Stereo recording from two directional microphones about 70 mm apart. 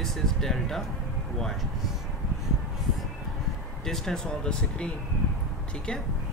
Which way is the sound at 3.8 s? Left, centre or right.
Centre.